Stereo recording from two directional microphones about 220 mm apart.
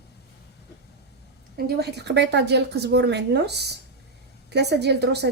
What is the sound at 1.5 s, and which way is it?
A woman's voice, 45° right (ahead or behind).